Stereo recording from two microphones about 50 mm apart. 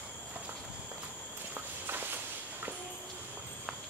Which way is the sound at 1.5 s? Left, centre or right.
Right.